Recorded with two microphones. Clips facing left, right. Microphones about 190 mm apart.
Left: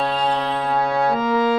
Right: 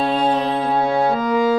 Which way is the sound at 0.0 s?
25° right (ahead or behind).